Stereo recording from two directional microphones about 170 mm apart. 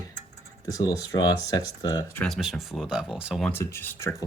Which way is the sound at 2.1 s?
Centre (ahead or behind).